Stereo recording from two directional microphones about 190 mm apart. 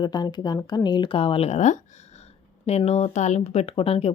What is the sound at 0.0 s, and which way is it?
Speech, 20° left (ahead or behind).